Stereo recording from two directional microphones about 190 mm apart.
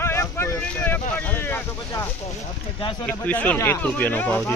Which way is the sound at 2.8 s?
25° left (ahead or behind).